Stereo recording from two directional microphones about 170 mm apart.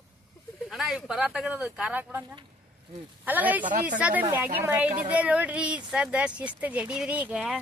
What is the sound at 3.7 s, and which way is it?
Speech, 50° right (ahead or behind).